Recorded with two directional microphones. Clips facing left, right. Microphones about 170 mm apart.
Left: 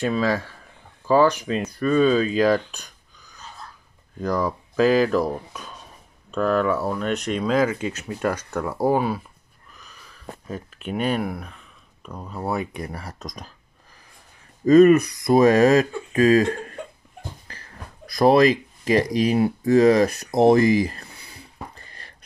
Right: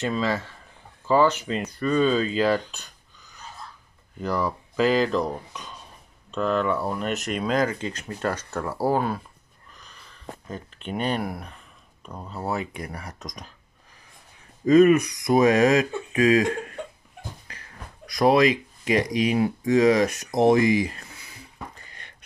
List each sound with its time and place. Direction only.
0.0 s speech: 10° left (ahead or behind)
10.9 s speech: 5° left (ahead or behind)
12.7 s speech: 30° left (ahead or behind)
14.7 s speech: 35° left (ahead or behind)